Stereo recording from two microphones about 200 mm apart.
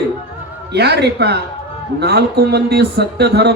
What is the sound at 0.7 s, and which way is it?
Speech, 55° right (ahead or behind).